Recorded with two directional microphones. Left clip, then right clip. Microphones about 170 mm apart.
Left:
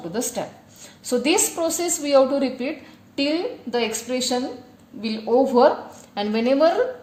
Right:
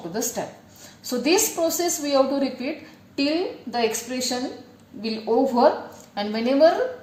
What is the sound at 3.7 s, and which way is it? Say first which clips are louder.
Speech: even; 40° left (ahead or behind).